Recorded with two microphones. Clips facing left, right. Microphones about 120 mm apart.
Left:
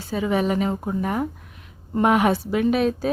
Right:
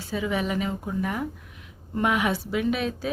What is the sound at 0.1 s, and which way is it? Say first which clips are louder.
Speech: left 5 dB; 40° left (ahead or behind).